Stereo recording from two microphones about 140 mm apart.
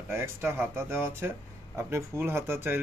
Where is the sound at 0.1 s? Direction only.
15° right (ahead or behind).